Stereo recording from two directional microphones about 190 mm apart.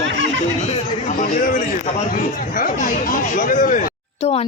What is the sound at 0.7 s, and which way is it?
A man's voice, 40° left (ahead or behind).